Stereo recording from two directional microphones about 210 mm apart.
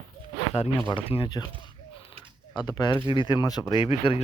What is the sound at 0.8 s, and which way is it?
Speech, 25° left (ahead or behind).